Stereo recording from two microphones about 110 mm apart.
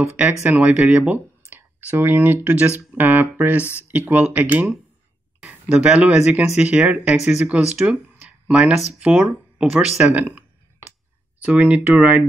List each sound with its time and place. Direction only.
0.0 s speech: 15° right (ahead or behind)